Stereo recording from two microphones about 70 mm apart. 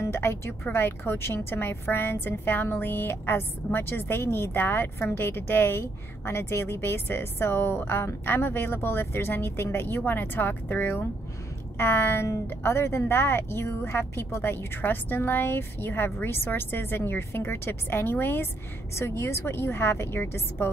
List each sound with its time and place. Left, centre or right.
0.0 s a woman's voice: left